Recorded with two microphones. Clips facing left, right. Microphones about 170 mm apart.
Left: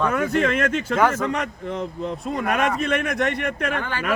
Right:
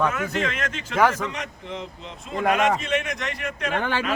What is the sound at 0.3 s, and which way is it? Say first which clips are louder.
A man's voice: left 7 dB; 50° left (ahead or behind).